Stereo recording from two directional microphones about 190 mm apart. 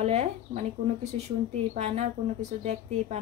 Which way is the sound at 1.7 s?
35° right (ahead or behind).